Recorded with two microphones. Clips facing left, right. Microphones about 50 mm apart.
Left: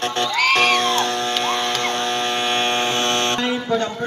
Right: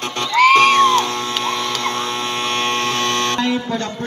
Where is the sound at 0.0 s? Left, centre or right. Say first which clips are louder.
Right 5 dB; centre.